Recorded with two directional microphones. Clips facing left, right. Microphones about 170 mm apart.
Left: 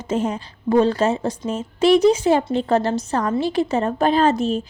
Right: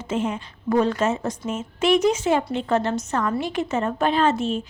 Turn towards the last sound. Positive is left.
turn(degrees=40)  # may be behind; listen again after turning